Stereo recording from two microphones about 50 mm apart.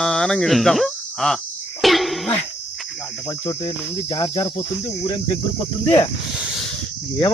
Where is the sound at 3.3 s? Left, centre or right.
Left.